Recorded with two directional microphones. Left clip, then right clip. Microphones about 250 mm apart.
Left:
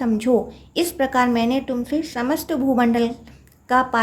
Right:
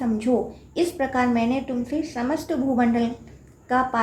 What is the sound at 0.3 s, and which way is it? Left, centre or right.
Speech, left.